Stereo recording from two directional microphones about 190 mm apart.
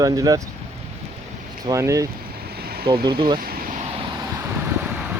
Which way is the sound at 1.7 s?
15° right (ahead or behind).